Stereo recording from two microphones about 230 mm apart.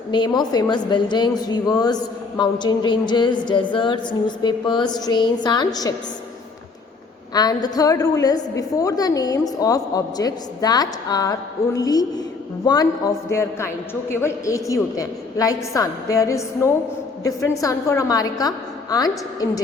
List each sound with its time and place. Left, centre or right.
0.1 s a woman's voice: centre
7.3 s a woman's voice: centre